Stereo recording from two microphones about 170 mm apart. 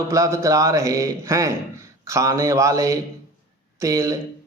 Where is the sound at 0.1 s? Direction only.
20° right (ahead or behind).